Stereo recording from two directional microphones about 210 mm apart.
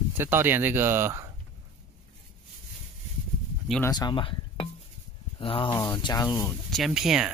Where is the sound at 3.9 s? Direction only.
20° left (ahead or behind).